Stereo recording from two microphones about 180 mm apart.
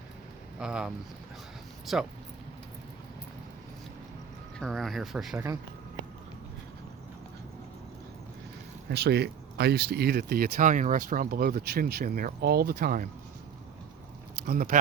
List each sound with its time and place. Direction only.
0.6 s speech: 5° right (ahead or behind)
4.6 s speech: centre (ahead or behind)
8.9 s speech: 65° right (ahead or behind)
14.4 s speech: 55° right (ahead or behind)